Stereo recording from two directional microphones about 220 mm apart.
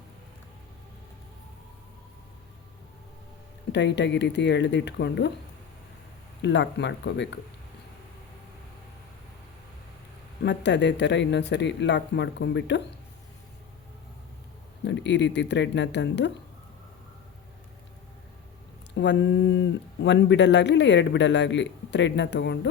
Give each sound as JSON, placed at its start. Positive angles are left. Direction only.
{"t": 3.7, "sound": "speech", "side_deg": 50}
{"t": 6.4, "sound": "speech", "side_deg": 55}
{"t": 10.4, "sound": "speech", "side_deg": 50}
{"t": 14.8, "sound": "speech", "side_deg": 55}
{"t": 18.9, "sound": "speech", "side_deg": 50}